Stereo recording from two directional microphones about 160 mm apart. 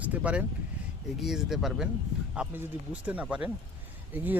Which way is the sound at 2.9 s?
10° right (ahead or behind).